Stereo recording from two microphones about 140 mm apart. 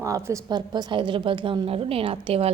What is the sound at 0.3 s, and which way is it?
A woman's voice, 25° right (ahead or behind).